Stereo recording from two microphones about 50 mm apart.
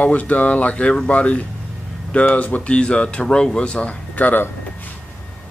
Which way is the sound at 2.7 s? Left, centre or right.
Centre.